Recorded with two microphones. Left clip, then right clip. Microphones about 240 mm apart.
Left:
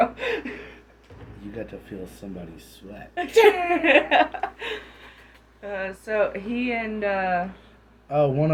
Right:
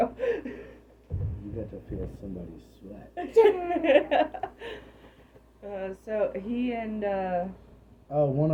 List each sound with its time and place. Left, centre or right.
0.0 s a sound: centre
3.2 s a woman's voice: centre
3.8 s speech: centre
4.4 s a sound: centre
5.7 s speech: centre
8.1 s a man's voice: left